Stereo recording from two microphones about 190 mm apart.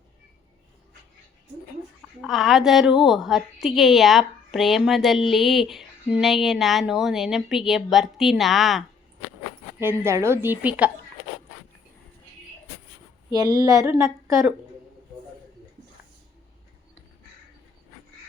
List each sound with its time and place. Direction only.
2.0 s a woman's voice: centre (ahead or behind)
9.8 s a woman's voice: 15° right (ahead or behind)
13.3 s a woman's voice: 20° right (ahead or behind)